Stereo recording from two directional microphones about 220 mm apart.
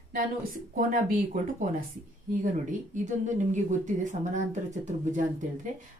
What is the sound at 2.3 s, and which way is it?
A woman's voice, 35° right (ahead or behind).